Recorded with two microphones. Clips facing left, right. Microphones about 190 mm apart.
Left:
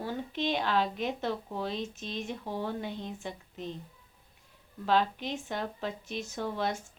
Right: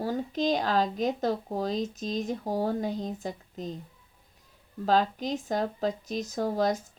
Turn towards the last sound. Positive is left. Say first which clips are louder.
# right 6 dB
turn(degrees=-40)  # may be behind; listen again after turning